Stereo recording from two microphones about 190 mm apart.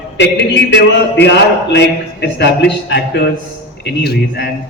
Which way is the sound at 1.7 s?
65° left (ahead or behind).